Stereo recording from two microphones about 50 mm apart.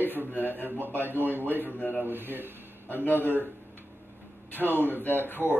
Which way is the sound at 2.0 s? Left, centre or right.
Right.